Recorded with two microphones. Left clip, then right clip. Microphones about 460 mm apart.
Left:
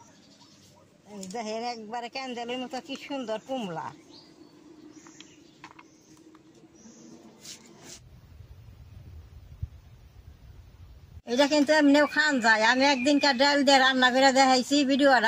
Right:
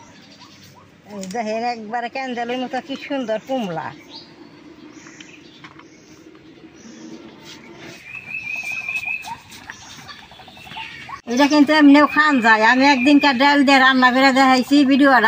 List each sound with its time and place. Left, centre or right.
1.3 s speech: left
11.2 s speech: left